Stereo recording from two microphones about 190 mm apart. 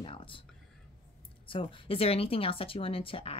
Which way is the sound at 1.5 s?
30° left (ahead or behind).